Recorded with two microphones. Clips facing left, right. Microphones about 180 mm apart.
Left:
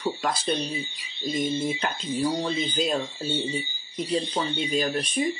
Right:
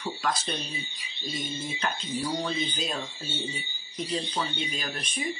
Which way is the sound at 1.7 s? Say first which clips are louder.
Left 3 dB; 30° left (ahead or behind).